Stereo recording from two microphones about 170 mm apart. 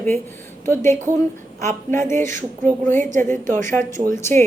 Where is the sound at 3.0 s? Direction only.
50° right (ahead or behind).